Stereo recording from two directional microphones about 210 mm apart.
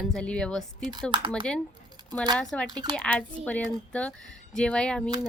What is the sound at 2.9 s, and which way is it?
Speech, 5° left (ahead or behind).